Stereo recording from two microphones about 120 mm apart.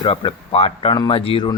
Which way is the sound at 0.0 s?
45° left (ahead or behind).